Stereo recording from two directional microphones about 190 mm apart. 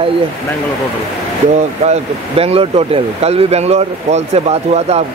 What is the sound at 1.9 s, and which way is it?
Speech, 30° right (ahead or behind).